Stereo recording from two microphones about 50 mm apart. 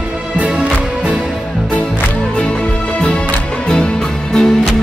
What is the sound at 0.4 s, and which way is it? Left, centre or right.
Music, right.